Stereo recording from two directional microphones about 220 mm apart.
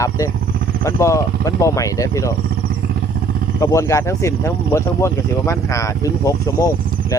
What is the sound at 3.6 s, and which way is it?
Speech, 15° left (ahead or behind).